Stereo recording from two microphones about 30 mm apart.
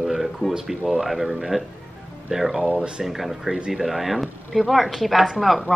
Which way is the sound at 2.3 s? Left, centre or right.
Centre.